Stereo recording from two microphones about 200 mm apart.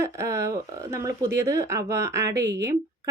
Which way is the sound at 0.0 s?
15° right (ahead or behind).